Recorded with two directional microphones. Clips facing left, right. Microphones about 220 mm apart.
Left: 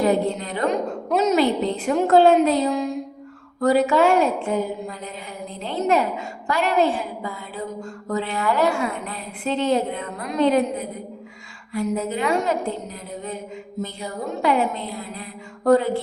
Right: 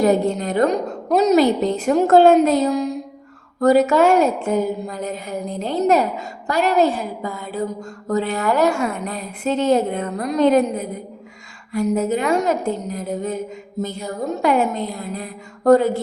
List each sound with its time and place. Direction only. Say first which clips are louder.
0.0 s a woman's voice: right 3 dB; 45° right (ahead or behind)